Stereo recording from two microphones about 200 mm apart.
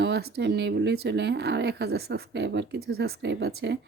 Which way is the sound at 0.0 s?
60° right (ahead or behind).